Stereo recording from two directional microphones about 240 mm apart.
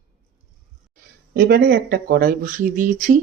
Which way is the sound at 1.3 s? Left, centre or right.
Right.